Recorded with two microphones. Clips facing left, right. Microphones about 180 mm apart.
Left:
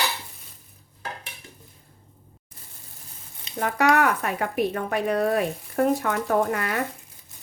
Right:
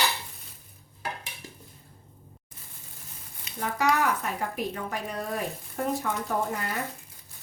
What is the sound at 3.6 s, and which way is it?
Speech, 65° left (ahead or behind).